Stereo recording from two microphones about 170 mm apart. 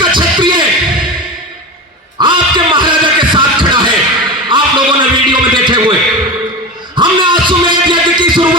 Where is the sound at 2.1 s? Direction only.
25° right (ahead or behind).